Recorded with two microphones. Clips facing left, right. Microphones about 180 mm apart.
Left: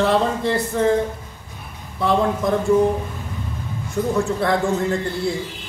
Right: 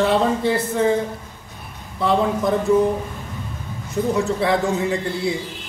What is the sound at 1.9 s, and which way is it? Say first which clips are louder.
Speech: even; centre (ahead or behind).